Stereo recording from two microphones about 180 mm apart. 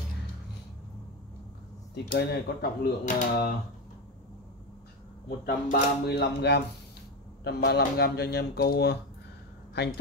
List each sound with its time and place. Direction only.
2.0 s speech: 60° left (ahead or behind)
5.4 s speech: 65° left (ahead or behind)